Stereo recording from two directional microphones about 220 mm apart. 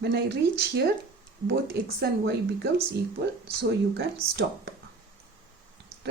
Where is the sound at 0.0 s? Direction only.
50° right (ahead or behind).